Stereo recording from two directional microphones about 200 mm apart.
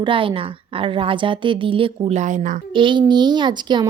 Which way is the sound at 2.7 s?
25° right (ahead or behind).